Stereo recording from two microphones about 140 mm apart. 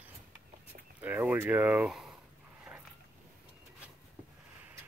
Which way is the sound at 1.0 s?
15° right (ahead or behind).